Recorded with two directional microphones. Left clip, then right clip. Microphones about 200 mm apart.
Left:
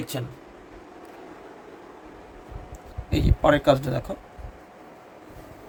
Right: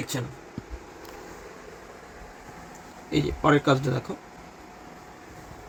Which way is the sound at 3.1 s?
60° left (ahead or behind).